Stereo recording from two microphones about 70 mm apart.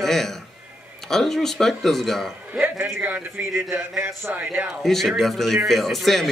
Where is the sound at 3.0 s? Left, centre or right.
Right.